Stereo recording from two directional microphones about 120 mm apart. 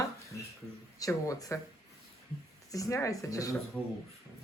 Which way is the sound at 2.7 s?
25° left (ahead or behind).